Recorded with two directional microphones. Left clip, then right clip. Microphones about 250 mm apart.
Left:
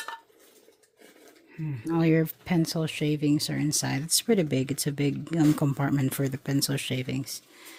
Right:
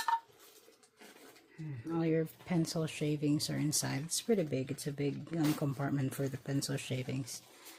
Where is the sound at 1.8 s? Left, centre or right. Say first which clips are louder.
Left 9 dB; left.